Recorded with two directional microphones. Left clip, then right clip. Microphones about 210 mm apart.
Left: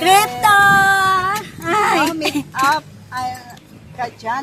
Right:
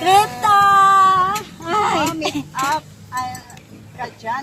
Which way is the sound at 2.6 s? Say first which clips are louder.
Left 6 dB; 55° left (ahead or behind).